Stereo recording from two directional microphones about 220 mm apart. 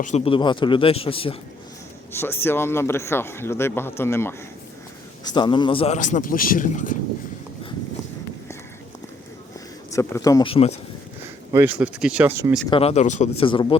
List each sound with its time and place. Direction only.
0.0 s a man's voice: 35° left (ahead or behind)
0.3 s speech: 20° left (ahead or behind)
2.1 s a man's voice: 10° left (ahead or behind); by 6.9 s 35° left (ahead or behind)
9.9 s speech: 15° left (ahead or behind)
11.5 s speech: 10° right (ahead or behind)
12.7 s speech: 30° left (ahead or behind)